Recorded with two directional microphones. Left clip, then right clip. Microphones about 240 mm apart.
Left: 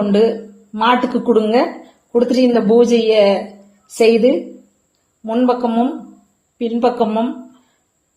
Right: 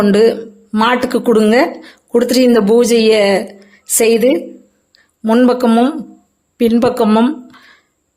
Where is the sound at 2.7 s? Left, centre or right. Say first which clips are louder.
Left 1 dB; right.